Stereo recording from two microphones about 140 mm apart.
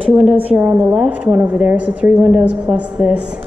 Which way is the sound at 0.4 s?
10° right (ahead or behind).